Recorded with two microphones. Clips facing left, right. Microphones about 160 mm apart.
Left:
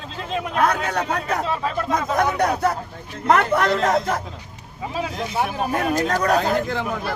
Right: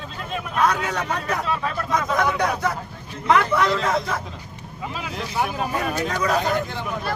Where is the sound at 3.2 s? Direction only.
45° left (ahead or behind).